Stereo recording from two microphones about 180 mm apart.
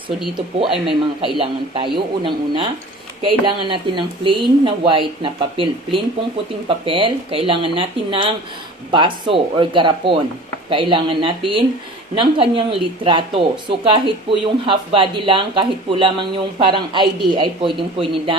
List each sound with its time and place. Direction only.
0.9 s speech: 30° right (ahead or behind)